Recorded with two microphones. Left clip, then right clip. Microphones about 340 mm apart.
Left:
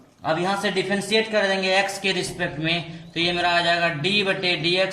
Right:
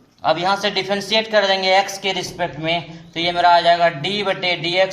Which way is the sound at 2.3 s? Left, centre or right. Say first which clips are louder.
Right 4 dB; centre.